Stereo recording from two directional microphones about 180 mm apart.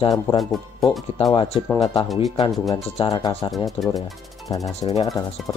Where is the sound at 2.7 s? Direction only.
30° left (ahead or behind).